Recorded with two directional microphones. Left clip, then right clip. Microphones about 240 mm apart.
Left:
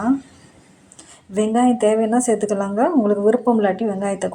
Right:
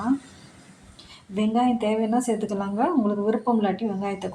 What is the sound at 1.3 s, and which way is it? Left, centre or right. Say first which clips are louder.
A woman's voice: left 6 dB; centre.